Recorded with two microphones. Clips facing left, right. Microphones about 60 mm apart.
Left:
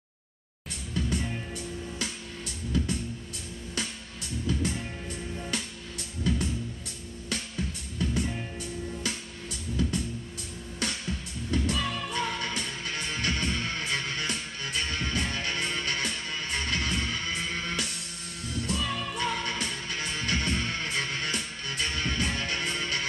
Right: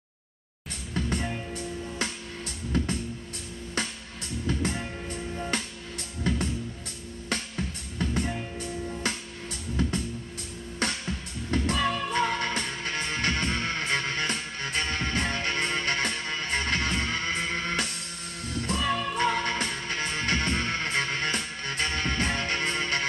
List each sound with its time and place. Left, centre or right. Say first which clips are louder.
0.9 s music: right 1 dB; right
4.5 s music: right 1 dB; right